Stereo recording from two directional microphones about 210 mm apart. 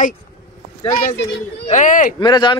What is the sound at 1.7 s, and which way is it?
Speech, 35° left (ahead or behind).